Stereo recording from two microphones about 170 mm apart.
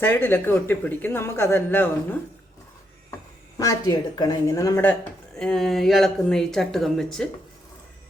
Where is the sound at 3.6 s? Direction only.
20° left (ahead or behind).